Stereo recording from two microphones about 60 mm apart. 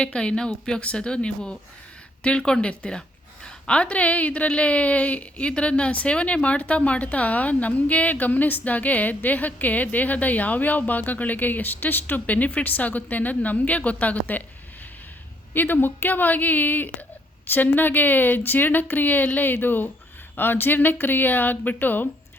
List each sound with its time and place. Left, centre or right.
0.0 s a woman's voice: centre
15.5 s speech: left